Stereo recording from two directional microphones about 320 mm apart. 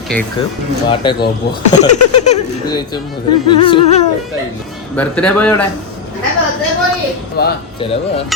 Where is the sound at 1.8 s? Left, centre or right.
Left.